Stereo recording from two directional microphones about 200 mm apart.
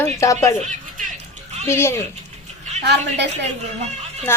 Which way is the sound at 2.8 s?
60° right (ahead or behind).